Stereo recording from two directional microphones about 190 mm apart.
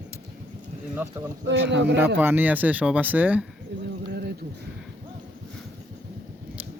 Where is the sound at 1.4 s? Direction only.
65° right (ahead or behind).